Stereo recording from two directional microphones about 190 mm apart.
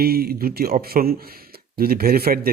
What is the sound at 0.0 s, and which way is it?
A man's voice, 55° right (ahead or behind).